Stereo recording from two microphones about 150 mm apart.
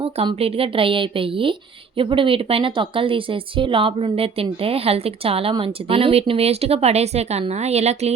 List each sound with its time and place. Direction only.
0.0 s speech: 40° right (ahead or behind)